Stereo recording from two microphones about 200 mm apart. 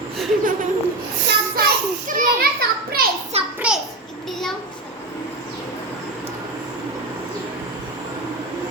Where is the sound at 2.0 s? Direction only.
40° right (ahead or behind).